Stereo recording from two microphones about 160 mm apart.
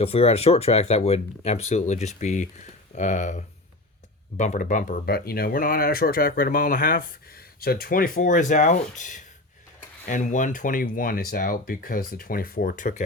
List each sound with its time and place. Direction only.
0.0 s speech: 40° left (ahead or behind); by 13.0 s 55° left (ahead or behind)